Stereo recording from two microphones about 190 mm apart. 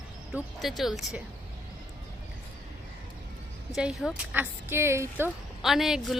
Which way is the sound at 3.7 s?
Centre (ahead or behind).